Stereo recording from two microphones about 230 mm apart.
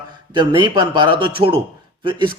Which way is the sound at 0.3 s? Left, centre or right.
Centre.